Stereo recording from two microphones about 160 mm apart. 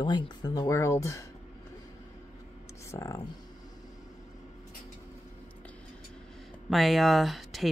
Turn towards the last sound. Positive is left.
turn(degrees=0)  # may be behind; listen again after turning